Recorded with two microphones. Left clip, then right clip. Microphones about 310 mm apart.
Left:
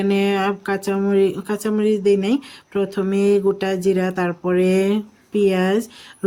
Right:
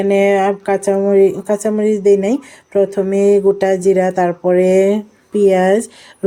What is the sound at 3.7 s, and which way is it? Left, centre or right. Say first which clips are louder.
Speech: right 7 dB; centre.